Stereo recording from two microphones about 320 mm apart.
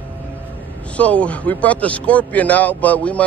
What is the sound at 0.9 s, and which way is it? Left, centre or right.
Speech, centre.